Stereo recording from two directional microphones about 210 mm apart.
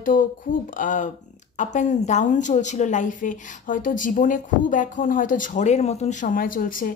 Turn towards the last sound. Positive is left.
turn(degrees=40)  # may be behind; listen again after turning